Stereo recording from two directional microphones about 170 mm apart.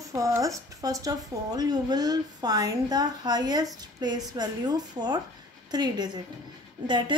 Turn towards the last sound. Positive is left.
turn(degrees=-25)  # may be behind; listen again after turning